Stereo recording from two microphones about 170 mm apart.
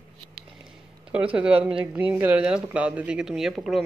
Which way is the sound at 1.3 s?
5° right (ahead or behind).